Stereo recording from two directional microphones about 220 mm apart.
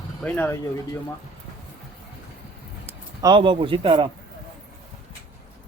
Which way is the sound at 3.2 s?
20° right (ahead or behind).